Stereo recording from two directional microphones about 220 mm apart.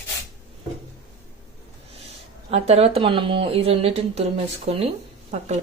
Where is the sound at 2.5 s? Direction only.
25° right (ahead or behind).